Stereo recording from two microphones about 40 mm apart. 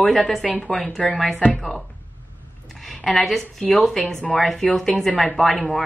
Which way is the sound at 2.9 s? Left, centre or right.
Centre.